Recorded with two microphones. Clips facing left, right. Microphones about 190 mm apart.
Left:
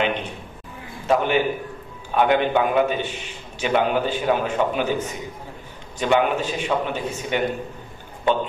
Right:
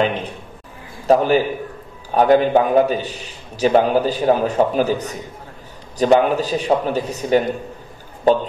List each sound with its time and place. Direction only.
1.0 s a man's voice: 35° right (ahead or behind)